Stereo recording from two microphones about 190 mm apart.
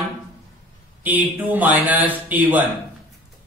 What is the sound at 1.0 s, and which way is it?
A man's voice, 10° right (ahead or behind).